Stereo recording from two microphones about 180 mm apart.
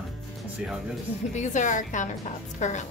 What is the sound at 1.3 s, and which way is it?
A woman's voice, 40° left (ahead or behind).